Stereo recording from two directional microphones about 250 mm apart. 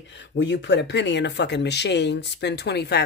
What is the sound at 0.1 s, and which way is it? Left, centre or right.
Speech, left.